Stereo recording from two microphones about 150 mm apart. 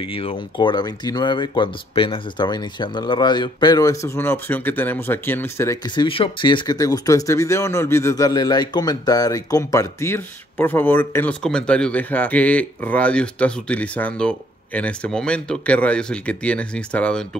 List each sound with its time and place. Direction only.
0.0 s speech: 40° left (ahead or behind); by 5.8 s 15° left (ahead or behind)
5.9 s speech: 35° left (ahead or behind); by 17.4 s 5° left (ahead or behind)